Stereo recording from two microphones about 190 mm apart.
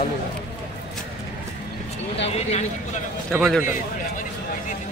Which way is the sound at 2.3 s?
35° left (ahead or behind).